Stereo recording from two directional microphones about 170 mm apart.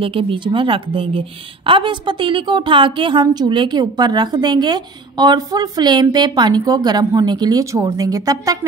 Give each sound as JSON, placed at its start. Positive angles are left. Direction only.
{"t": 0.0, "sound": "a woman's voice", "side_deg": -30}